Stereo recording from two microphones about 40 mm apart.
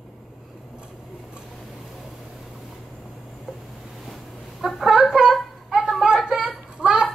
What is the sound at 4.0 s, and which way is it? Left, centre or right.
Fowl, centre.